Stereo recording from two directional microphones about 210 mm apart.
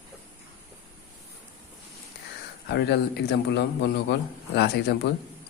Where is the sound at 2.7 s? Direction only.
55° left (ahead or behind).